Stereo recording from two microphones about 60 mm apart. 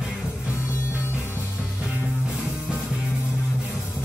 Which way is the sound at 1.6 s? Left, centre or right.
Centre.